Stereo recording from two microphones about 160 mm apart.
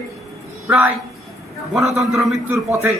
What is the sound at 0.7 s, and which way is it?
A man's voice, 10° right (ahead or behind).